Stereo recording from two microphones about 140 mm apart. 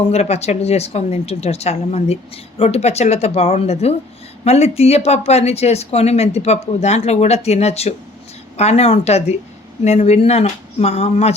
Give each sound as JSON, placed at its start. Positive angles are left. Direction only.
{"t": 0.1, "sound": "speech", "side_deg": 50}